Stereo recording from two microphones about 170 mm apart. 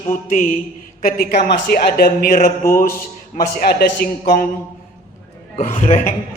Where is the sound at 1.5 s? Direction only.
70° left (ahead or behind).